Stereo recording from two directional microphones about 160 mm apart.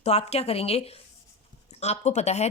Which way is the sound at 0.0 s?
40° left (ahead or behind).